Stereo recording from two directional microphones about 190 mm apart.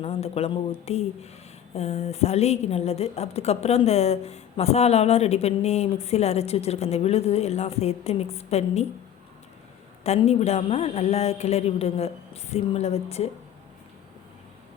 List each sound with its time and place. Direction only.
0.0 s a woman's voice: 30° left (ahead or behind)
10.0 s a woman's voice: 35° left (ahead or behind)